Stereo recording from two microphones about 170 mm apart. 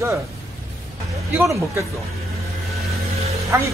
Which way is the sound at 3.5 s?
15° right (ahead or behind).